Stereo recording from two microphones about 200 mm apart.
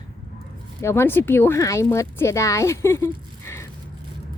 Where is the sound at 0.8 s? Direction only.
10° left (ahead or behind).